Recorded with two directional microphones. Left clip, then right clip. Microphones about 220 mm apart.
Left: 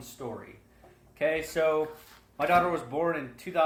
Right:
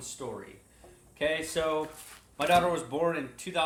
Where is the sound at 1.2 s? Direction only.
15° left (ahead or behind).